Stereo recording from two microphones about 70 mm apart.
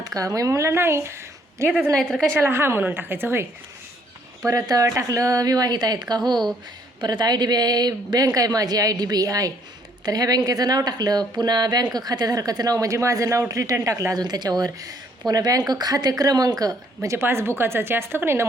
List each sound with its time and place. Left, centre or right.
0.0 s a woman's voice: right
2.0 s a woman's voice: centre
2.3 s speech: right
4.4 s speech: right
14.1 s speech: right
17.2 s speech: right